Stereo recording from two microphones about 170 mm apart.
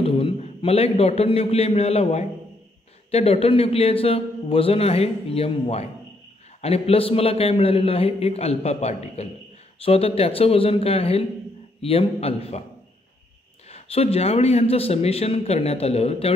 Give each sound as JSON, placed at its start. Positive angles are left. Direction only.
{"t": 0.0, "sound": "a man's voice", "side_deg": 35}
{"t": 13.7, "sound": "a man's voice", "side_deg": 35}